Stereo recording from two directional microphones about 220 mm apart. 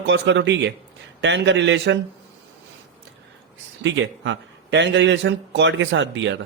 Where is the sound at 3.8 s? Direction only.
60° right (ahead or behind).